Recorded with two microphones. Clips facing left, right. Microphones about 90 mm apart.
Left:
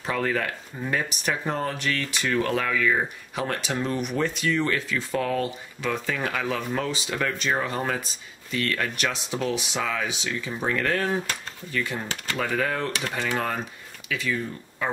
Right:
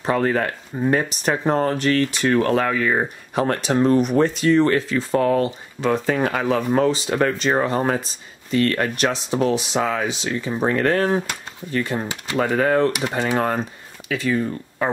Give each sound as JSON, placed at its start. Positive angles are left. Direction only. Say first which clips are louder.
{"t": 0.0, "sound": "speech", "louder": "right 6 dB", "side_deg": -40}
{"t": 14.0, "sound": "speech", "louder": "right 7 dB", "side_deg": -45}